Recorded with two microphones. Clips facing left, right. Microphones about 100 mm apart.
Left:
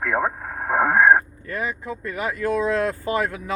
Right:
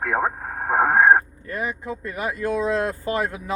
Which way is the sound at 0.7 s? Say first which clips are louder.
Even; 25° right (ahead or behind).